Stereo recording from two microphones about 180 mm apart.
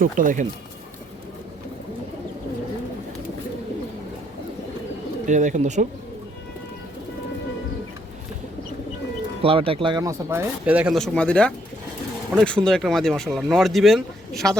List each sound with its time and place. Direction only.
0.0 s speech: 45° right (ahead or behind)
5.2 s speech: 45° right (ahead or behind)
9.4 s speech: 30° right (ahead or behind); by 14.5 s centre (ahead or behind)